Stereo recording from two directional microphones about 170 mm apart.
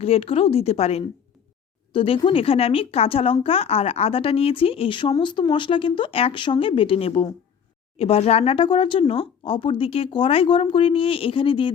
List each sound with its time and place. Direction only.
0.0 s speech: 35° left (ahead or behind)